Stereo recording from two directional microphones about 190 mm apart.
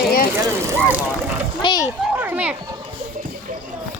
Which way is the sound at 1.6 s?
25° left (ahead or behind).